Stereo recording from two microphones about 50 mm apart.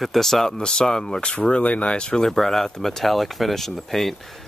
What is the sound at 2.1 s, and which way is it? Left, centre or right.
Speech, centre.